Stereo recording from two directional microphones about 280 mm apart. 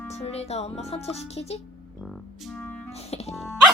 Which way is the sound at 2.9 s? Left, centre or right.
Left.